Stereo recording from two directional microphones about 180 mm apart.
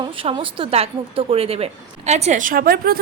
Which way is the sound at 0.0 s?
30° right (ahead or behind).